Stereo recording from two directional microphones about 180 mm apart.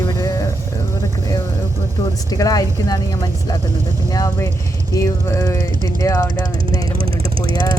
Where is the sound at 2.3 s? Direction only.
20° left (ahead or behind).